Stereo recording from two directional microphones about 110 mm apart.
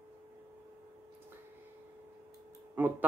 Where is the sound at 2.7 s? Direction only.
15° right (ahead or behind).